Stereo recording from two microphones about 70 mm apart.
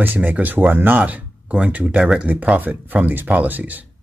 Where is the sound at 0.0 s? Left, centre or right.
Right.